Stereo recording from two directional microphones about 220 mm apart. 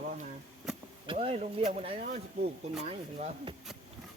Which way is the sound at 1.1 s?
25° right (ahead or behind).